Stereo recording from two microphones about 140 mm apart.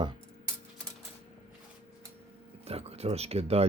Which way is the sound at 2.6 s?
45° right (ahead or behind).